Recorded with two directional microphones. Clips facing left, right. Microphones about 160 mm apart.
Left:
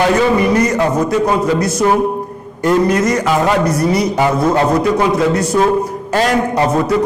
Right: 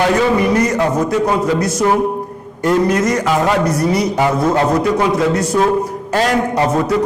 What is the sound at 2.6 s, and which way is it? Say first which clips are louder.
A man's voice: left 1 dB; 15° left (ahead or behind).